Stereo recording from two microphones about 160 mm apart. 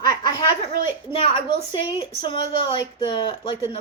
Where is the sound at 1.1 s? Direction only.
30° left (ahead or behind).